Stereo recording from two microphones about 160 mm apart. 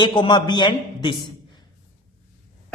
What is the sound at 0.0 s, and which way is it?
A man's voice, 30° left (ahead or behind).